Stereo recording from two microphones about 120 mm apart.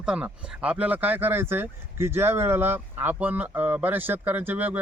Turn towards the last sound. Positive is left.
turn(degrees=-15)  # may be behind; listen again after turning